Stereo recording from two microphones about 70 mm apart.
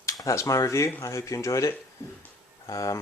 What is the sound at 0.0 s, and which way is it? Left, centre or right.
Speech, left.